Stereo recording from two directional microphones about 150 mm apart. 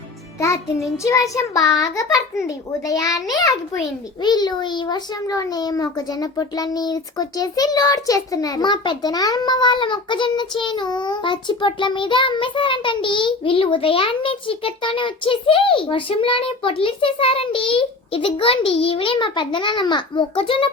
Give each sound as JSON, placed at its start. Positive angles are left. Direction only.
{"t": 1.0, "sound": "a child's voice", "side_deg": 20}